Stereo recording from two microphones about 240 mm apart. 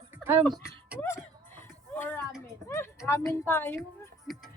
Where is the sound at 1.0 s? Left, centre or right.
Centre.